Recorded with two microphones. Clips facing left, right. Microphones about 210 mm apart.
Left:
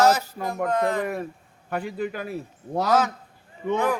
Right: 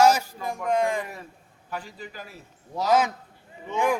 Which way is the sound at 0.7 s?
10° right (ahead or behind).